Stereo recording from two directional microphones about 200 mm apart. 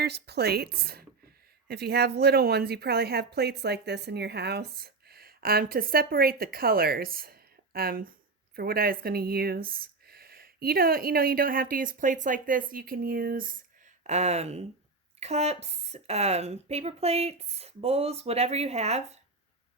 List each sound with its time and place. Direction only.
0.0 s speech: 55° right (ahead or behind)
14.0 s speech: 35° right (ahead or behind)